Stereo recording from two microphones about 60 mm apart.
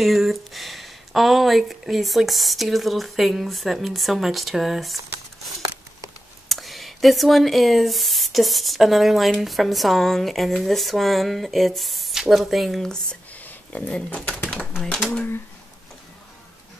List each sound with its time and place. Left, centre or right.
0.0 s speech: centre
6.5 s speech: centre
13.3 s a sound: left